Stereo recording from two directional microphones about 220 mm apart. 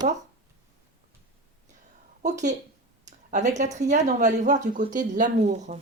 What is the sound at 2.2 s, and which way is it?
Speech, 35° right (ahead or behind).